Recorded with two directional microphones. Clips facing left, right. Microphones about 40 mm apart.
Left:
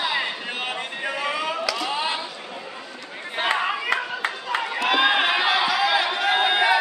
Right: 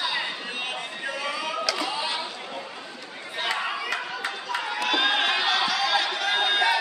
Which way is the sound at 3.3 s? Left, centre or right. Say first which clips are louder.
Left 5 dB; left.